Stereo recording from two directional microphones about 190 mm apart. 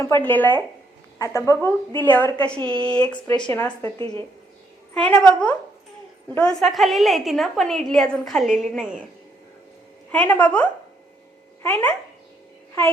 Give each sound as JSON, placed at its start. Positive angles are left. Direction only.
{"t": 0.0, "sound": "speech", "side_deg": 10}
{"t": 2.6, "sound": "speech", "side_deg": -25}
{"t": 3.1, "sound": "speech", "side_deg": 25}
{"t": 3.5, "sound": "speech", "side_deg": 10}
{"t": 6.3, "sound": "a woman's voice", "side_deg": 5}
{"t": 10.1, "sound": "speech", "side_deg": 10}